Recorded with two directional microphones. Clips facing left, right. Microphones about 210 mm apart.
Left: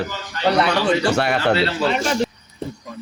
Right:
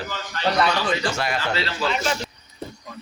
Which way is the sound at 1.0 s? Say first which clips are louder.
Left 7 dB; 65° left (ahead or behind).